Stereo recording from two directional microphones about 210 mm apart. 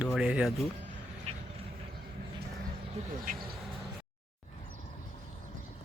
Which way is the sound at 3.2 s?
40° right (ahead or behind).